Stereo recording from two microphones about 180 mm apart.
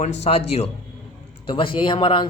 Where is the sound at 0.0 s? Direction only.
35° left (ahead or behind).